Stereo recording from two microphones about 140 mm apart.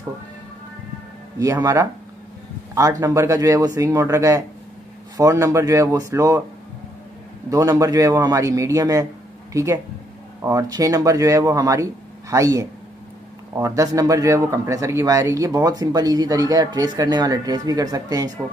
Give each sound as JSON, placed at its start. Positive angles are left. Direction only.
{"t": 1.4, "sound": "speech", "side_deg": -25}
{"t": 7.4, "sound": "speech", "side_deg": -25}